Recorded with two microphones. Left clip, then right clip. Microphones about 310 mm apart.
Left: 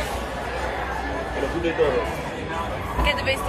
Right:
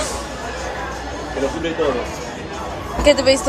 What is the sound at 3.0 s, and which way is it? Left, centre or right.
Speech, centre.